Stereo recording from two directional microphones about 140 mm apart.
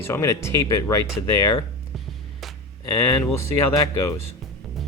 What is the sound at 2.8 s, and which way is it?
Speech, 20° left (ahead or behind).